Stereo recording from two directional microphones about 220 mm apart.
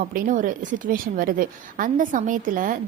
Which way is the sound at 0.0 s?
40° right (ahead or behind).